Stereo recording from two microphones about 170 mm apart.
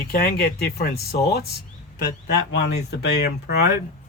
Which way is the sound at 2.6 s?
80° left.